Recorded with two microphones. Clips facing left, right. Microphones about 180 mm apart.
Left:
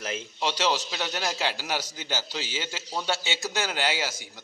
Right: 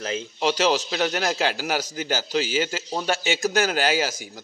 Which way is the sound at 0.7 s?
55° right (ahead or behind).